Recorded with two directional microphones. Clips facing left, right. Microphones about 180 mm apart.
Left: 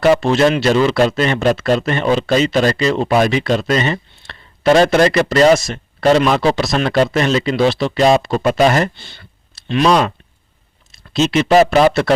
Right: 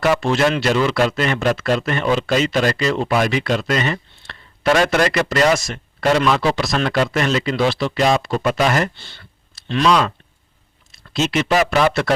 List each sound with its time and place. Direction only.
0.0 s speech: 25° left (ahead or behind)
9.0 s clicking: 15° left (ahead or behind)
10.9 s speech: 25° left (ahead or behind)